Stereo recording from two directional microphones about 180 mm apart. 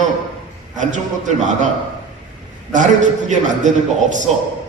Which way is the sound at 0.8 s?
45° right (ahead or behind).